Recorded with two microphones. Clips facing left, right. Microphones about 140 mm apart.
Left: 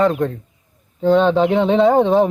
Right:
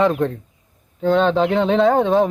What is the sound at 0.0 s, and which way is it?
Speech, centre (ahead or behind).